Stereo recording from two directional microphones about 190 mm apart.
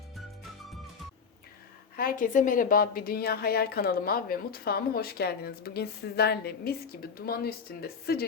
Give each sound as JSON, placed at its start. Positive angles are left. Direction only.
{"t": 2.0, "sound": "a woman's voice", "side_deg": 45}